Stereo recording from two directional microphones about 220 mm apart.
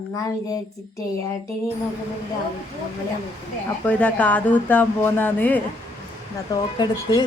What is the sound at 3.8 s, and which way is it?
A woman's voice, 5° left (ahead or behind).